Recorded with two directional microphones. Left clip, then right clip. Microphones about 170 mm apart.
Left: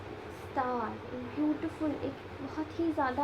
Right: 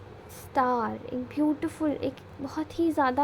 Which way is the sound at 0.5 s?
65° right (ahead or behind).